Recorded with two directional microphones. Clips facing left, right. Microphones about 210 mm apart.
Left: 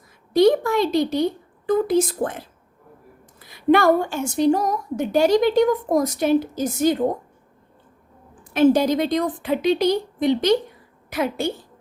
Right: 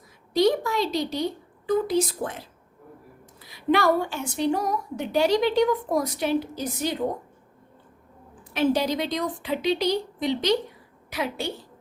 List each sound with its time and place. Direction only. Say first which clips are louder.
0.3 s a woman's voice: left 5 dB; 50° left (ahead or behind)
8.5 s a woman's voice: left 7 dB; 50° left (ahead or behind)